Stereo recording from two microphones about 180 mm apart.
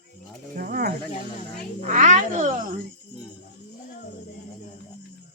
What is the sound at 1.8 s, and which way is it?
Speech, 40° right (ahead or behind).